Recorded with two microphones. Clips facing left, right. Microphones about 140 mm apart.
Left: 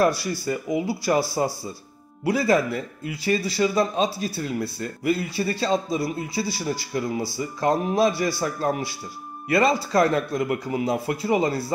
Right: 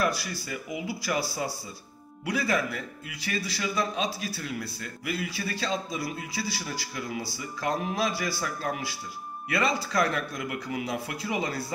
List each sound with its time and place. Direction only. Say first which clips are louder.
0.0 s a man's voice: left 7 dB; 30° left (ahead or behind)
8.5 s speech: left 7 dB; 40° left (ahead or behind)